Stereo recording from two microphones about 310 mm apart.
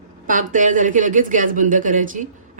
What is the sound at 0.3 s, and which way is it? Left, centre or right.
A woman's voice, right.